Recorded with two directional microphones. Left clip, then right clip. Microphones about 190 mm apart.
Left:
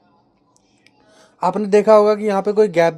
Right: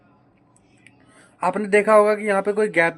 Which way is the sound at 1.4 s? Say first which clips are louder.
Left 3 dB; 30° left (ahead or behind).